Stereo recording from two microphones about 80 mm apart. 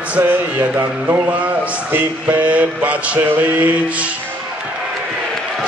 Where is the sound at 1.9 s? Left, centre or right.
Centre.